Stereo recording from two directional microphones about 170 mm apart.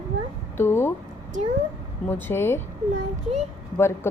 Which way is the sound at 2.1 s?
15° left (ahead or behind).